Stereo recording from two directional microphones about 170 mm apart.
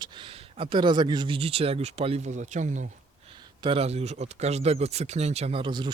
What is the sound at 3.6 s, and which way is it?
Speech, 35° right (ahead or behind).